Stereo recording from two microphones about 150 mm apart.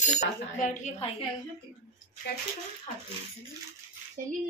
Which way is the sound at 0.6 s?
60° left (ahead or behind).